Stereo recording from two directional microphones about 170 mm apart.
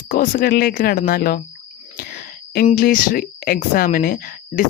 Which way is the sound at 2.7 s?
55° left (ahead or behind).